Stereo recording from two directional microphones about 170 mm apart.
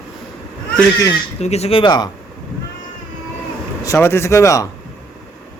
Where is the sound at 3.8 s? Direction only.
15° left (ahead or behind).